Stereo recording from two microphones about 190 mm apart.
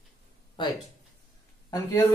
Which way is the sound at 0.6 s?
25° left (ahead or behind).